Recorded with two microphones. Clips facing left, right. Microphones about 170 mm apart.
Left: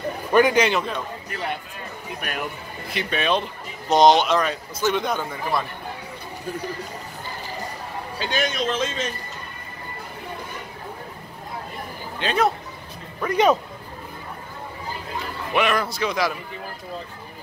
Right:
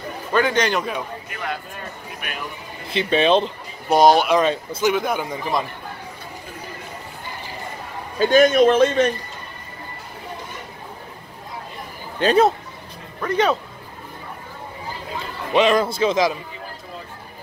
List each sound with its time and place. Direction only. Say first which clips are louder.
0.3 s a man's voice: left 2 dB; 15° left (ahead or behind)
2.9 s speech: right 6 dB; 25° right (ahead or behind)
3.9 s a man's voice: right 1 dB; 5° right (ahead or behind)
4.4 s speech: right 5 dB; 25° right (ahead or behind)
4.9 s a man's voice: right 2 dB; 5° right (ahead or behind)
8.2 s a man's voice: right 12 dB; 45° right (ahead or behind)
12.2 s speech: right 7 dB; 40° right (ahead or behind)
13.2 s a man's voice: left 1 dB; 10° left (ahead or behind)
15.5 s speech: right 5 dB; 25° right (ahead or behind)